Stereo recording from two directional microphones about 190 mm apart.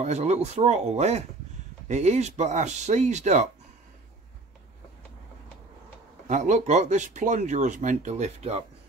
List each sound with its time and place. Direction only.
0.0 s speech: 35° right (ahead or behind)
6.2 s speech: 40° right (ahead or behind)